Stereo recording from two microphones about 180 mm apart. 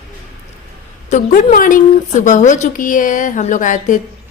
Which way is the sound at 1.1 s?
50° left (ahead or behind).